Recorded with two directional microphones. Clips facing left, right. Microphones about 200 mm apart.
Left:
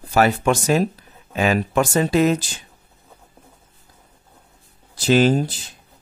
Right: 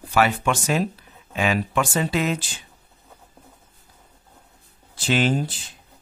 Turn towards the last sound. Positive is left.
turn(degrees=40)  # may be behind; listen again after turning